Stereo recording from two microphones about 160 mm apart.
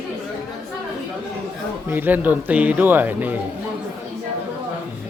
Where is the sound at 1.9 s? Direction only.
10° right (ahead or behind).